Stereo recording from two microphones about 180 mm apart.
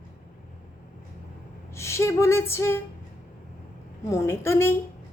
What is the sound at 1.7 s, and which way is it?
A woman's voice, 15° left (ahead or behind).